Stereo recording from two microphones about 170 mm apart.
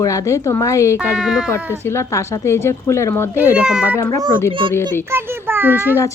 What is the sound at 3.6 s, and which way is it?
Speech, 5° right (ahead or behind).